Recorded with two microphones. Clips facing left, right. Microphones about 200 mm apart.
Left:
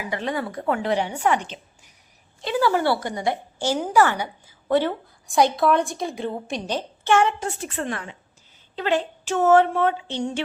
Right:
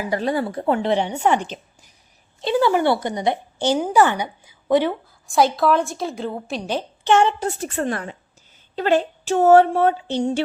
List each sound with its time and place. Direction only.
0.1 s a woman's voice: 35° right (ahead or behind); by 4.9 s 15° right (ahead or behind)
5.5 s a woman's voice: centre (ahead or behind)
6.7 s a woman's voice: 10° right (ahead or behind)
7.1 s speech: 30° right (ahead or behind)